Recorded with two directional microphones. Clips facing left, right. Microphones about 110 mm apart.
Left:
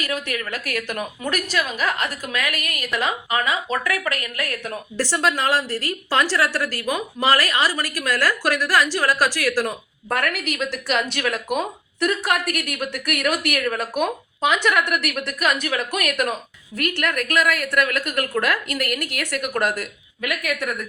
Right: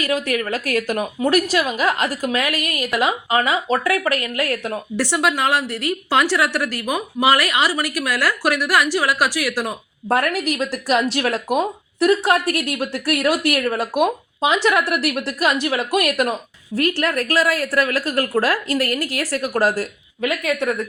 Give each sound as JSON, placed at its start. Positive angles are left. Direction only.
{"t": 0.0, "sound": "a woman's voice", "side_deg": -40}
{"t": 2.9, "sound": "a woman's voice", "side_deg": -10}
{"t": 3.2, "sound": "speech", "side_deg": -25}
{"t": 4.9, "sound": "a woman's voice", "side_deg": -15}
{"t": 10.1, "sound": "a woman's voice", "side_deg": -35}